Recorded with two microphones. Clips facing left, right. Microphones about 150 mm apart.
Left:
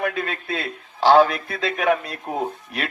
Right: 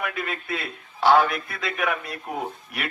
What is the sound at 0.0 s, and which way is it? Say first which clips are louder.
A man's voice: left 5 dB; 30° left (ahead or behind).